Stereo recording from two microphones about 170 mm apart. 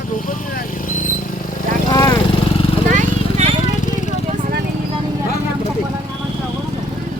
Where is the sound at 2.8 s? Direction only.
45° right (ahead or behind).